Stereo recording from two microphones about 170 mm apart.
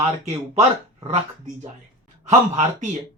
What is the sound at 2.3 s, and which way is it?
Speech, 45° right (ahead or behind).